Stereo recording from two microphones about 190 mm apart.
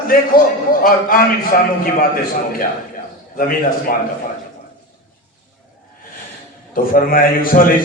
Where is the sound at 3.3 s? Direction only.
50° left (ahead or behind).